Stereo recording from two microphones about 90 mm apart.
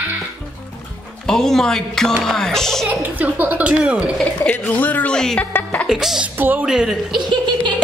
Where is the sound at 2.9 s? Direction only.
20° right (ahead or behind).